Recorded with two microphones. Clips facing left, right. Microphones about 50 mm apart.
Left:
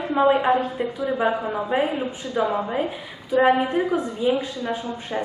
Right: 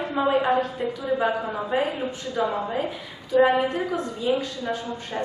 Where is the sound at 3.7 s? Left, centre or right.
Centre.